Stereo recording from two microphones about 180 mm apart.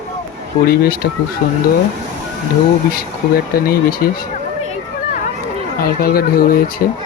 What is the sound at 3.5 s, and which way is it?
Speech, 55° left (ahead or behind).